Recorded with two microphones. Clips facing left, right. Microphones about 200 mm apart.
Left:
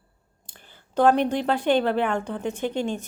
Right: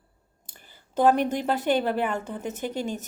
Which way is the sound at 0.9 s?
5° right (ahead or behind).